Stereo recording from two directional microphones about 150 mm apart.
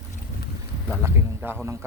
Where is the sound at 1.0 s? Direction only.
15° right (ahead or behind).